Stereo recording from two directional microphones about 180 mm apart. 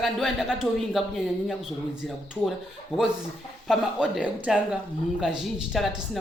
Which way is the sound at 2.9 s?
30° left (ahead or behind).